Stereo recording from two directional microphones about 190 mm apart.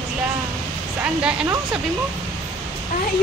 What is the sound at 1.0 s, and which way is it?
Speech, 5° right (ahead or behind).